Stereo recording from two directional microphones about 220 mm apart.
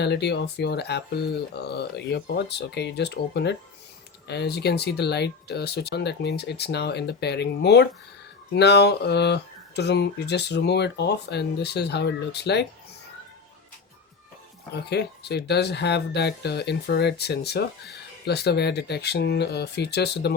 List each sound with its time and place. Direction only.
0.0 s speech: 50° left (ahead or behind)
14.7 s speech: 50° left (ahead or behind)